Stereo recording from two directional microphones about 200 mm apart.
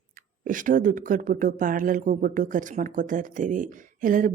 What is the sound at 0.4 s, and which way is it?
Speech, 40° right (ahead or behind).